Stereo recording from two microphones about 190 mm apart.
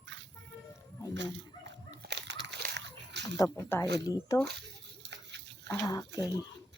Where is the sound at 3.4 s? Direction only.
10° left (ahead or behind).